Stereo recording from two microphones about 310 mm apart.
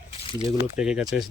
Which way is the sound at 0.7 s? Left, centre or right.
Centre.